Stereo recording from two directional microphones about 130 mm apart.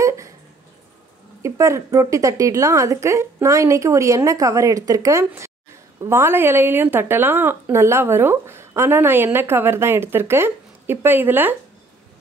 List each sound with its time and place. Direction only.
1.4 s a woman's voice: 25° right (ahead or behind)